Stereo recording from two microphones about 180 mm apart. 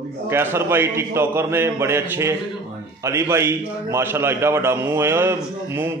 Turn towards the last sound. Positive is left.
turn(degrees=-15)  # may be behind; listen again after turning